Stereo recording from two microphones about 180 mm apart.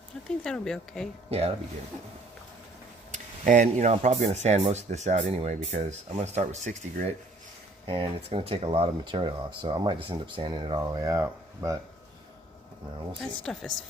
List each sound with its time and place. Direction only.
0.3 s speech: 5° left (ahead or behind)
3.1 s speech: 45° right (ahead or behind); by 11.8 s 20° right (ahead or behind)
13.4 s speech: centre (ahead or behind)